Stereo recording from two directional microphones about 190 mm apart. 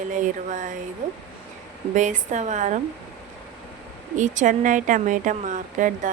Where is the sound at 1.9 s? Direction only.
40° right (ahead or behind).